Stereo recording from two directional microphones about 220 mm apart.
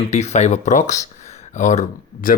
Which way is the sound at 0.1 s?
30° left (ahead or behind).